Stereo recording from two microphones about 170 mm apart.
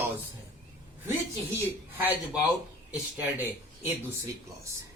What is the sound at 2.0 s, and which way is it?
Speech, 10° right (ahead or behind).